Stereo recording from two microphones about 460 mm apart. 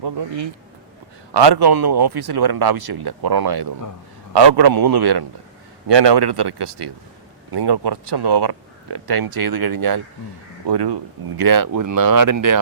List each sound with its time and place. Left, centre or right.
0.0 s speech: right
11.3 s speech: right